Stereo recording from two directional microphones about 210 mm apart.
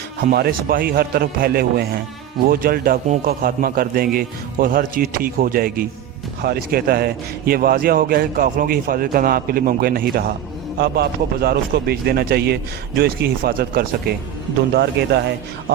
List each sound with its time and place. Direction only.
0.2 s a man's voice: 45° right (ahead or behind)